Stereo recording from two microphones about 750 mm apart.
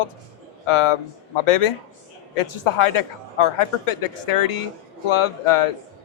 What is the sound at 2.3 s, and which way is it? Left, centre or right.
A man's voice, left.